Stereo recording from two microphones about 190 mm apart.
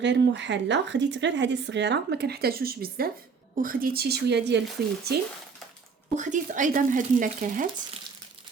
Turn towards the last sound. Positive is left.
turn(degrees=-45)  # may be behind; listen again after turning